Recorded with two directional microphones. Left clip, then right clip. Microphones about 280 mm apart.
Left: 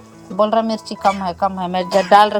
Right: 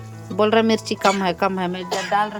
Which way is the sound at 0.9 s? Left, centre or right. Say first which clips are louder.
Left 4 dB; right.